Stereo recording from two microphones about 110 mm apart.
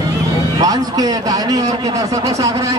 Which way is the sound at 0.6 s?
35° right (ahead or behind).